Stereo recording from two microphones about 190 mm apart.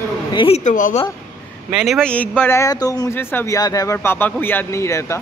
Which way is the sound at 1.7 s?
Centre (ahead or behind).